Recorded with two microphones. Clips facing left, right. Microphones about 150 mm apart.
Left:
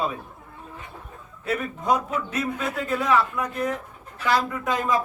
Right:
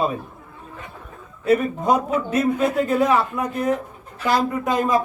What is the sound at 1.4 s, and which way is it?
Speech, 45° right (ahead or behind).